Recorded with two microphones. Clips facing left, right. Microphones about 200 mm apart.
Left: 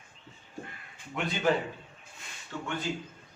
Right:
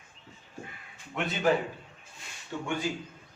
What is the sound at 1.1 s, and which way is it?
Speech, centre (ahead or behind).